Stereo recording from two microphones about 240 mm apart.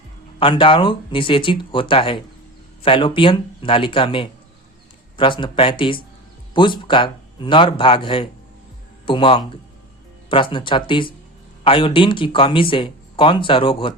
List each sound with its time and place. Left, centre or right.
0.3 s speech: left